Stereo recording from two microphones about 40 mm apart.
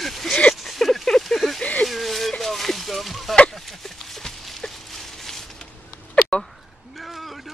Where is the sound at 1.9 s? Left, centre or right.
Centre.